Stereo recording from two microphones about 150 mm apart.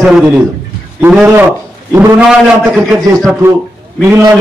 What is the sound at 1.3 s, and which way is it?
Speech, 15° right (ahead or behind).